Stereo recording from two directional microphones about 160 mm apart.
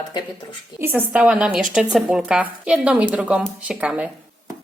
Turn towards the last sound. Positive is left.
turn(degrees=-10)  # may be behind; listen again after turning